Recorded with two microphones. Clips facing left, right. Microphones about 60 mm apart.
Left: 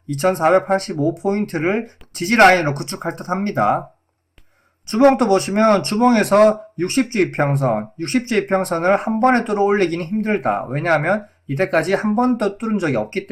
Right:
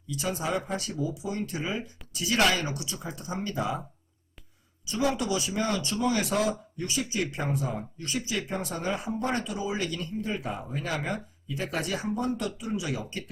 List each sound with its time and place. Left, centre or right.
0.1 s speech: left
4.9 s speech: left